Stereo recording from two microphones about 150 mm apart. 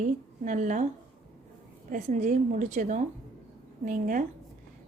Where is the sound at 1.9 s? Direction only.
55° right (ahead or behind).